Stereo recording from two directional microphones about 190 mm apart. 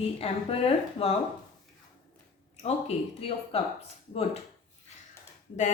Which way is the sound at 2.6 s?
35° left (ahead or behind).